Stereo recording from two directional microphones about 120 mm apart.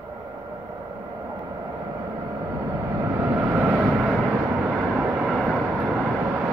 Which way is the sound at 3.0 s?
20° right (ahead or behind).